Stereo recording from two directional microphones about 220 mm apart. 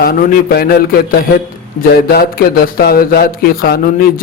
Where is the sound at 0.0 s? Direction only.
40° left (ahead or behind).